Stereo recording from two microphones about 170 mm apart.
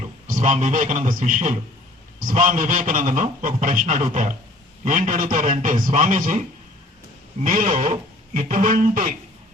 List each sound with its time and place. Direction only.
0.3 s a man's voice: 50° right (ahead or behind)
7.4 s a man's voice: 50° right (ahead or behind)